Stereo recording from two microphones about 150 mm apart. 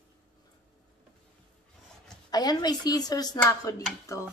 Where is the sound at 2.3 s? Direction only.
25° left (ahead or behind).